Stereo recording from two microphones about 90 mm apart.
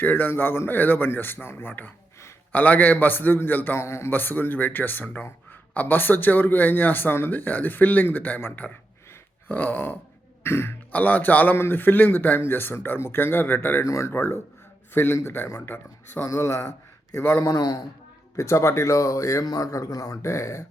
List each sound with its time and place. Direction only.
0.0 s speech: 20° left (ahead or behind)
10.9 s speech: 15° left (ahead or behind)
13.8 s speech: 35° left (ahead or behind)
14.1 s speech: 25° left (ahead or behind)